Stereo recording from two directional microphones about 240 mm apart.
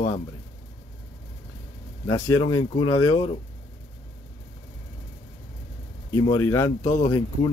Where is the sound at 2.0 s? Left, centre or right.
Centre.